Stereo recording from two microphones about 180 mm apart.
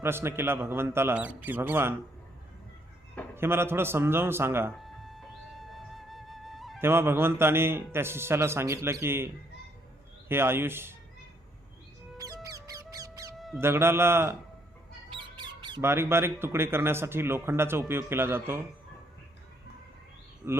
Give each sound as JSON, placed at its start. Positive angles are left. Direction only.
{"t": 0.0, "sound": "a man's voice", "side_deg": -15}
{"t": 3.3, "sound": "a man's voice", "side_deg": -15}
{"t": 4.7, "sound": "music", "side_deg": 0}
{"t": 6.7, "sound": "a man's voice", "side_deg": -15}
{"t": 12.1, "sound": "music", "side_deg": -20}
{"t": 13.3, "sound": "mouse", "side_deg": 0}
{"t": 13.6, "sound": "a man's voice", "side_deg": -15}
{"t": 15.1, "sound": "squawk", "side_deg": -25}
{"t": 15.8, "sound": "a man's voice", "side_deg": -15}
{"t": 20.4, "sound": "a man's voice", "side_deg": -10}